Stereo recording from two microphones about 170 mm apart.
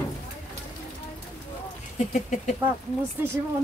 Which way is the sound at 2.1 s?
45° left (ahead or behind).